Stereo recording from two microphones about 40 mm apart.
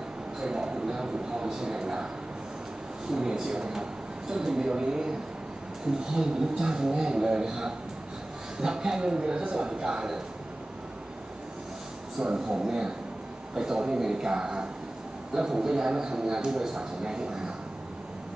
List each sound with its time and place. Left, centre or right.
0.4 s a sound: centre
3.1 s a man's voice: centre
6.1 s speech: centre
12.4 s a man's voice: centre